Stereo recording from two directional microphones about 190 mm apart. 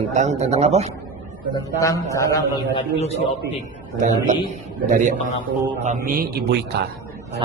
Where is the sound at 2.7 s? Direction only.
35° left (ahead or behind).